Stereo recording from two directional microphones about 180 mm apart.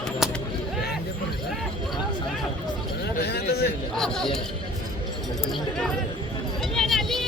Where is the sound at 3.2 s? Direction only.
65° left (ahead or behind).